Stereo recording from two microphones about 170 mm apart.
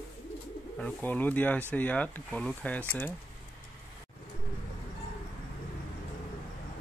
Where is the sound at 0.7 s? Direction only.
10° left (ahead or behind).